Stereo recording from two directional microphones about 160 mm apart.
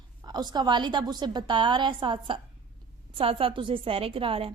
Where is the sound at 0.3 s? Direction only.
25° right (ahead or behind).